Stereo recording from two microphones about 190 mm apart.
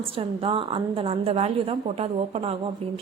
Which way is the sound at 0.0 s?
30° right (ahead or behind).